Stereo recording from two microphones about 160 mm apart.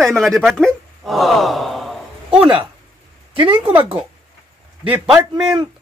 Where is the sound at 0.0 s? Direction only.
Centre (ahead or behind).